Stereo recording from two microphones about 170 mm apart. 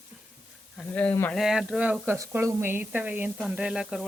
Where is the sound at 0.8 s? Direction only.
10° left (ahead or behind).